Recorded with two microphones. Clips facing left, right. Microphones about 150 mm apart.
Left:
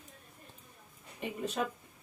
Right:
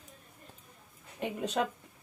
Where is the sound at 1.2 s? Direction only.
80° right.